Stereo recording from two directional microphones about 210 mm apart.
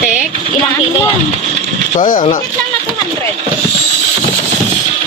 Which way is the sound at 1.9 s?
35° left (ahead or behind).